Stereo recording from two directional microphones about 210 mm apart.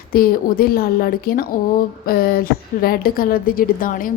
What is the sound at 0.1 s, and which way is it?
A woman's voice, 45° left (ahead or behind).